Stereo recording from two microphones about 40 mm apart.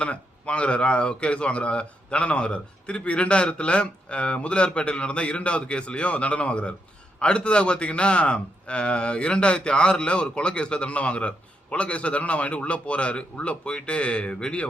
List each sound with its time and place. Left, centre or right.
0.0 s a man's voice: left